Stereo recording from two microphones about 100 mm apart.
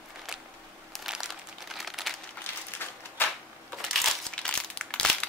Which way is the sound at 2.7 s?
20° left (ahead or behind).